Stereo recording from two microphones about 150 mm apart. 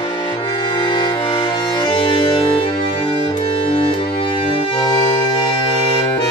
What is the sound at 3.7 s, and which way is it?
Music, 40° left (ahead or behind).